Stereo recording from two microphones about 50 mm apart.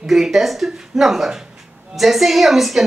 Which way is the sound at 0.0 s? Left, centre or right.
Centre.